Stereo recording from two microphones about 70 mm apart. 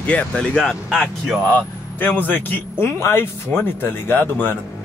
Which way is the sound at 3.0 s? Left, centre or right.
Left.